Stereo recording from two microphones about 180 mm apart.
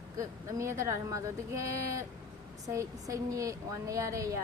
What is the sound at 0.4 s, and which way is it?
A woman's voice, 15° right (ahead or behind).